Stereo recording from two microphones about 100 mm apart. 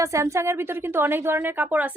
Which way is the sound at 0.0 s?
30° right (ahead or behind).